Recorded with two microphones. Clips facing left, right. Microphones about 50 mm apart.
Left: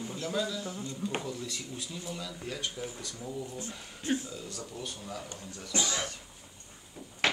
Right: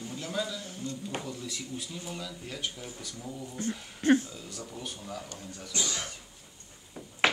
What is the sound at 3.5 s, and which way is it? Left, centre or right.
Speech, right.